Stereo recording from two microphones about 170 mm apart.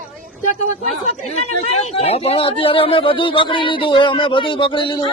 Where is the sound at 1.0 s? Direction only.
40° left (ahead or behind).